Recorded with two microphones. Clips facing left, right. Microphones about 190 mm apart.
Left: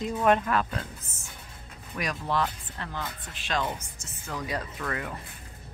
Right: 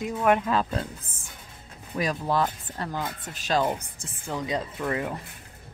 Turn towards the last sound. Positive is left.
turn(degrees=-25)  # may be behind; listen again after turning